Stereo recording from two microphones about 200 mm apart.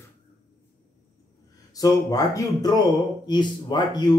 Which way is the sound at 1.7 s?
15° left (ahead or behind).